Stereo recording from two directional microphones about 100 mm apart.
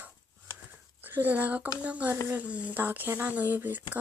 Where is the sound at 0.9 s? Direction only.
20° right (ahead or behind).